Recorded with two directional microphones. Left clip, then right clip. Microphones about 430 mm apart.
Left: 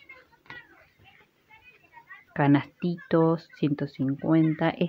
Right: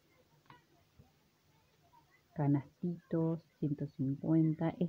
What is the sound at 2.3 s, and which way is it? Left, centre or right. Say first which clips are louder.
Speech: left 13 dB; right.